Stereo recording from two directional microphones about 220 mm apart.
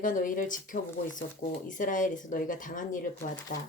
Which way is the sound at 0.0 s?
35° left (ahead or behind).